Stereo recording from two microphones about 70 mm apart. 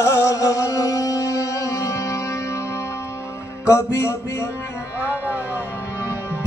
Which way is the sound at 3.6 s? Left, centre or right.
Left.